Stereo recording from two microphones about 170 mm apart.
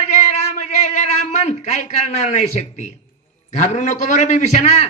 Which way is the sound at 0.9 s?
45° left (ahead or behind).